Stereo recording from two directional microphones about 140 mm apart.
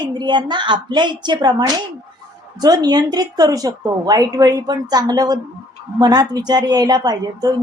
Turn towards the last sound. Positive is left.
turn(degrees=-30)  # may be behind; listen again after turning